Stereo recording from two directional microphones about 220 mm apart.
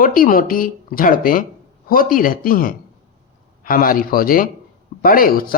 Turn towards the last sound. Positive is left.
turn(degrees=40)  # may be behind; listen again after turning